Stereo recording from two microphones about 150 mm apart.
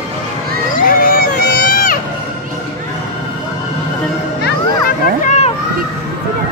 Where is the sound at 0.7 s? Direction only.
70° left (ahead or behind).